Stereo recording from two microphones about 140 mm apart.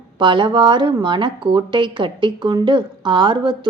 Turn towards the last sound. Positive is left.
turn(degrees=-35)  # may be behind; listen again after turning